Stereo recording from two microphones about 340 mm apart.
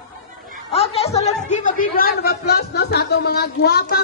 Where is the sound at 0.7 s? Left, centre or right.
Centre.